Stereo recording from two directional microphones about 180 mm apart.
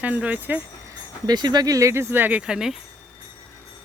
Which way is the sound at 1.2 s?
25° right (ahead or behind).